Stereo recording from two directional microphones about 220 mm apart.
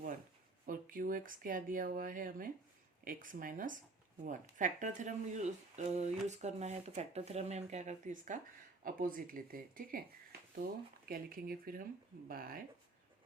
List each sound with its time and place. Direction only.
0.6 s speech: 40° right (ahead or behind)
11.1 s speech: 40° right (ahead or behind)